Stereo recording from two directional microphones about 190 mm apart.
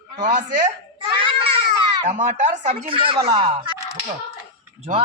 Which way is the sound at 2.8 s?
30° right (ahead or behind).